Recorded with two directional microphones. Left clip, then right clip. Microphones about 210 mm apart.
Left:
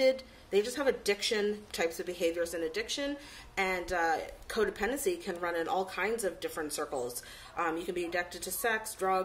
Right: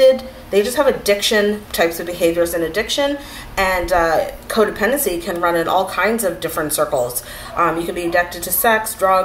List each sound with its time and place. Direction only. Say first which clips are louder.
0.0 s a woman's voice: right 16 dB; 45° left (ahead or behind)